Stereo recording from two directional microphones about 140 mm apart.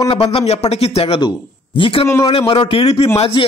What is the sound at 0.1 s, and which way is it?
A man's voice, 40° left (ahead or behind).